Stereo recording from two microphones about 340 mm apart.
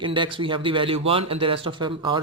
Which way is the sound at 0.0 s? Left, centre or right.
Centre.